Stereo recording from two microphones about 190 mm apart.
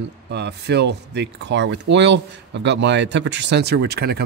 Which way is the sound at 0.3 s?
65° right (ahead or behind).